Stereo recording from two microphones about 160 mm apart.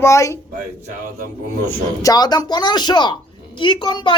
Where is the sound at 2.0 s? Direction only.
25° left (ahead or behind).